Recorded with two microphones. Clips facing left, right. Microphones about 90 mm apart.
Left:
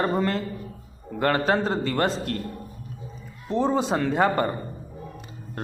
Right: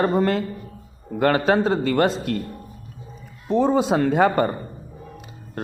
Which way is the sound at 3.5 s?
60° right (ahead or behind).